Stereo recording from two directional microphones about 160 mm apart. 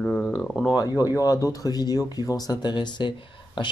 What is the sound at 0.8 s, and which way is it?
Speech, 20° left (ahead or behind).